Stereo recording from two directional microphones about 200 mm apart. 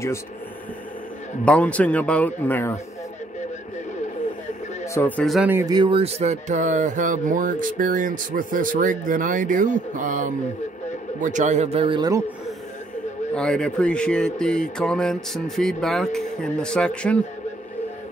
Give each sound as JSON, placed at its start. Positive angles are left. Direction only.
{"t": 1.4, "sound": "a man's voice", "side_deg": 5}
{"t": 4.8, "sound": "speech", "side_deg": 10}
{"t": 13.3, "sound": "speech", "side_deg": 5}